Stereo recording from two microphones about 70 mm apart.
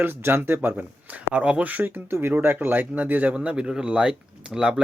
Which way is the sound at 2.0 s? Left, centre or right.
Right.